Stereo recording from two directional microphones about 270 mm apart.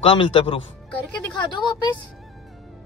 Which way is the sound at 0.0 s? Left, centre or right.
Left.